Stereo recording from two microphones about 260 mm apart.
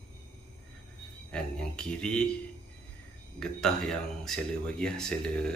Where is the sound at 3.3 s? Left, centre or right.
Centre.